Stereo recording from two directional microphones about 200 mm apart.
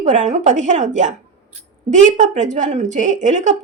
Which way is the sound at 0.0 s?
40° right (ahead or behind).